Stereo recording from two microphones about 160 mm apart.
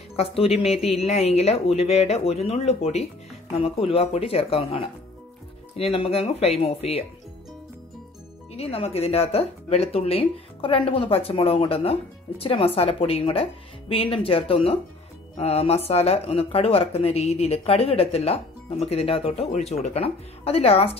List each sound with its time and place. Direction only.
0.1 s speech: 40° left (ahead or behind)
8.5 s speech: 40° left (ahead or behind)